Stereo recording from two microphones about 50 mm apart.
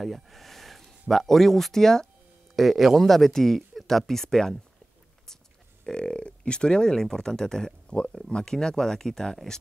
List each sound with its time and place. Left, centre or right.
0.0 s speech: centre
2.5 s speech: centre
5.9 s speech: centre